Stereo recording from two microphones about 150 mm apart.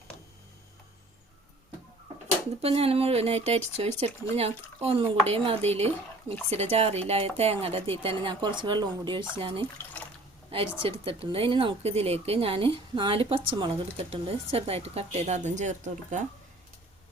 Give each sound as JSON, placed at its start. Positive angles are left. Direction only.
{"t": 2.6, "sound": "speech", "side_deg": -40}
{"t": 10.8, "sound": "speech", "side_deg": -40}